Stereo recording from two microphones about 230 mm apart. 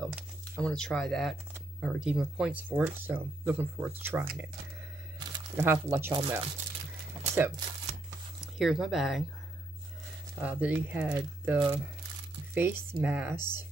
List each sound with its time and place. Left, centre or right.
0.0 s a sound: centre
1.5 s speech: centre
6.2 s speech: right
7.3 s speech: centre
10.4 s speech: centre